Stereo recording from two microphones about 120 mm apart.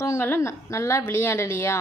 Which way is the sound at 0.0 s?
20° left (ahead or behind).